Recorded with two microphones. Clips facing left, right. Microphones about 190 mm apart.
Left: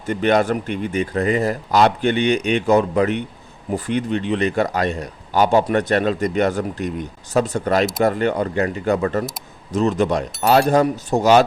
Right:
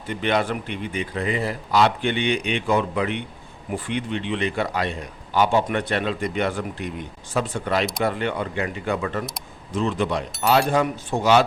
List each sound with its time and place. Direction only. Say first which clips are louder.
0.0 s a man's voice: left 6 dB; 45° left (ahead or behind)